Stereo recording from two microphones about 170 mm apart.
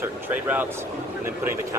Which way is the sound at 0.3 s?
10° right (ahead or behind).